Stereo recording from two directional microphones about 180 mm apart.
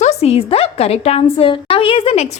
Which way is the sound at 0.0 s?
35° left (ahead or behind).